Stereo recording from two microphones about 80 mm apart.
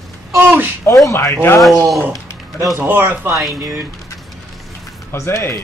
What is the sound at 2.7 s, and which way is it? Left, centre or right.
Speech, right.